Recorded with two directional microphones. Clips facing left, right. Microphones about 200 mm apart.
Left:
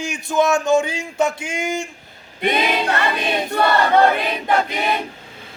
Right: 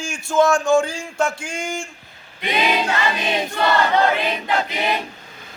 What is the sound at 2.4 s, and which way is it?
Choir, 55° left (ahead or behind).